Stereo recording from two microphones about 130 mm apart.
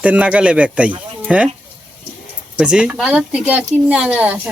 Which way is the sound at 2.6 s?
5° right (ahead or behind).